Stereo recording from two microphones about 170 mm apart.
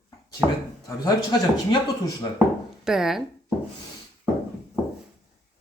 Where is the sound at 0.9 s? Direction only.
20° left (ahead or behind).